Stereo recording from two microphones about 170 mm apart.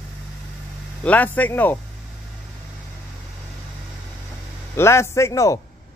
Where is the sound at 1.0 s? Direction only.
10° left (ahead or behind).